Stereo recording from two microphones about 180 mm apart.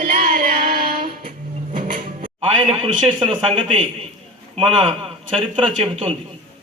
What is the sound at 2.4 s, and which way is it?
A man's voice, 30° right (ahead or behind).